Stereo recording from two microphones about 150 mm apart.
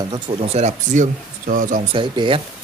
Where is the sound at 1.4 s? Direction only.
65° right (ahead or behind).